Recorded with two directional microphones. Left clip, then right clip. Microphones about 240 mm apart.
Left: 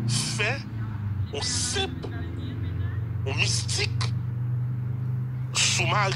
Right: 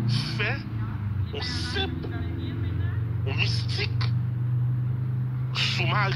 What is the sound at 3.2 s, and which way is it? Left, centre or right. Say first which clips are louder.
Speech: left 2 dB; left.